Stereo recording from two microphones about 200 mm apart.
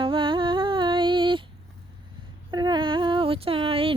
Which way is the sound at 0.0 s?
25° right (ahead or behind).